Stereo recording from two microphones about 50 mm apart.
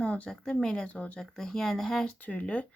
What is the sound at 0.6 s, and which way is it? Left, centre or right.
Speech, centre.